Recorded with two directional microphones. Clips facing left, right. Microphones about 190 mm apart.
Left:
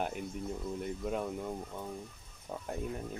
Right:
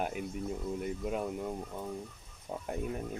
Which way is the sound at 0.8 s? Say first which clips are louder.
Even; 5° right (ahead or behind).